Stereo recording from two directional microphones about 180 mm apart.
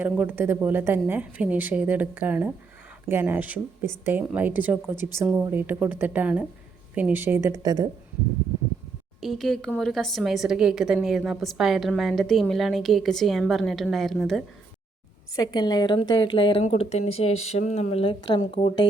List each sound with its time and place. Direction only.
0.0 s speech: 10° right (ahead or behind)
9.2 s a woman's voice: centre (ahead or behind)
15.4 s a woman's voice: 25° left (ahead or behind)